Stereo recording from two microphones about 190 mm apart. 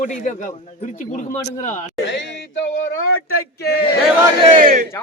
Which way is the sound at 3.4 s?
60° left (ahead or behind).